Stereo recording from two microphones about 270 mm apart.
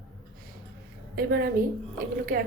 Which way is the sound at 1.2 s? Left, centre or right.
Right.